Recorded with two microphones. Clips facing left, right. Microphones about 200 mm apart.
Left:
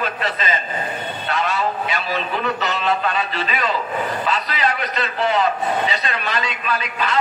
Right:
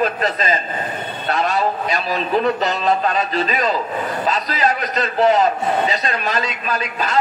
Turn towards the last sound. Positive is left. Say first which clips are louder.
# right 1 dB
turn(degrees=-40)  # may be behind; listen again after turning